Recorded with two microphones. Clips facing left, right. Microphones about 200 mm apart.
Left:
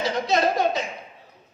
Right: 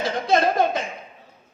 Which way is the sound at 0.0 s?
55° right (ahead or behind).